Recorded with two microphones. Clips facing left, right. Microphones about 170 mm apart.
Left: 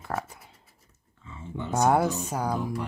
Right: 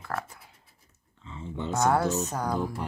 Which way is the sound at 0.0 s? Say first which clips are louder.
Left 2 dB; 20° left (ahead or behind).